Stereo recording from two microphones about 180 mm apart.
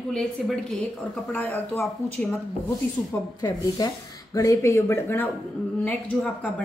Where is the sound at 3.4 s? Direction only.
20° left (ahead or behind).